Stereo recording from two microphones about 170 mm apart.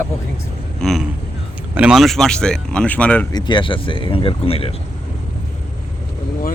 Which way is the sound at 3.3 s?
25° left (ahead or behind).